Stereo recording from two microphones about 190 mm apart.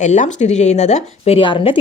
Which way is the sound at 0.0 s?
40° left (ahead or behind).